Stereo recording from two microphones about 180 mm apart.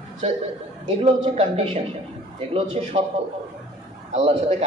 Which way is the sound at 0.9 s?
35° right (ahead or behind).